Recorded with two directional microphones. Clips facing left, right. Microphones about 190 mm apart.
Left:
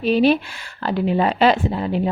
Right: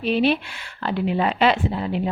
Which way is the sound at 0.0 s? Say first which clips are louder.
Left 4 dB; 40° left (ahead or behind).